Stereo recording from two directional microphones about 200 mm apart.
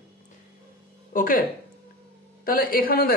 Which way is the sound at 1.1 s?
45° left (ahead or behind).